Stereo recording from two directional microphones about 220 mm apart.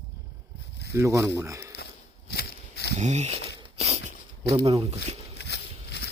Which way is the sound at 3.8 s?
30° right (ahead or behind).